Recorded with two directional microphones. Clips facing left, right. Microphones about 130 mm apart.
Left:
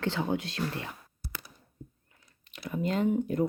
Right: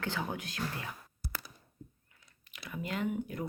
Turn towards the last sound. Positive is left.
turn(degrees=30)  # may be behind; listen again after turning